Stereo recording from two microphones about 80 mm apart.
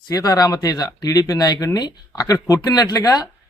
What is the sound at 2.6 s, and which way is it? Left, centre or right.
Speech, left.